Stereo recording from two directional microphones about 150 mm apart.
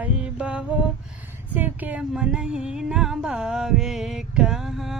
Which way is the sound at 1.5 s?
10° right (ahead or behind).